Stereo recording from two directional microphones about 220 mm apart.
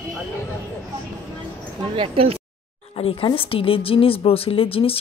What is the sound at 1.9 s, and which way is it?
Speech, 25° right (ahead or behind).